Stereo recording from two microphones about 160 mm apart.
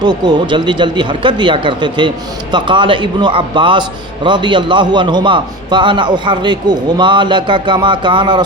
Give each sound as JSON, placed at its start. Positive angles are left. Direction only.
{"t": 0.0, "sound": "speech", "side_deg": -25}